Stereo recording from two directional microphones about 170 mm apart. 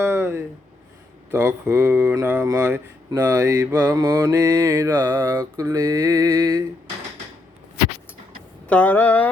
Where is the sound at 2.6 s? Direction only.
10° right (ahead or behind).